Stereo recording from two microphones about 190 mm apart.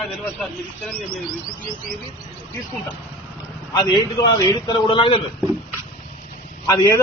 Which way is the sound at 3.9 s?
20° left (ahead or behind).